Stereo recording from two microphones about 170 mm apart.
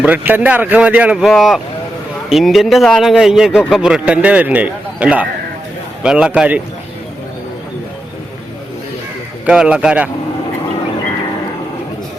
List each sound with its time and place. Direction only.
0.0 s a man's voice: 10° right (ahead or behind)
9.5 s a man's voice: 5° right (ahead or behind)